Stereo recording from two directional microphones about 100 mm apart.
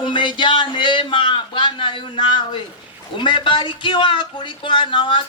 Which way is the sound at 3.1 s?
55° left (ahead or behind).